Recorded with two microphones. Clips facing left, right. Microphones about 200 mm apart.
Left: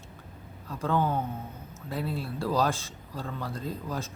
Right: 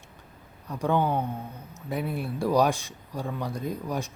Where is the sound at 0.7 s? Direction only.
15° right (ahead or behind).